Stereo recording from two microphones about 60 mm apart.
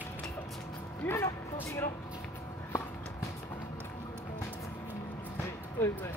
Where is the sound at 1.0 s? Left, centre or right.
Left.